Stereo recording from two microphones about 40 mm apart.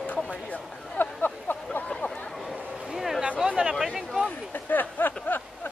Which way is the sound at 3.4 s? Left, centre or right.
Centre.